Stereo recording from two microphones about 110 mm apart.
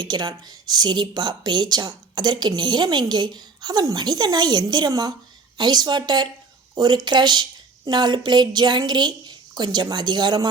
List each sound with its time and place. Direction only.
0.0 s speech: 40° right (ahead or behind)